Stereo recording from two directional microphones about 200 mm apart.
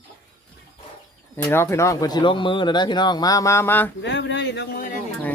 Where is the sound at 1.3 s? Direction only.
10° left (ahead or behind).